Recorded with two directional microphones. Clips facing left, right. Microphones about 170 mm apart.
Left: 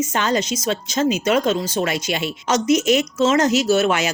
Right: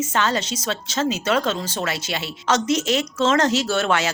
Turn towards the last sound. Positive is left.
turn(degrees=10)  # may be behind; listen again after turning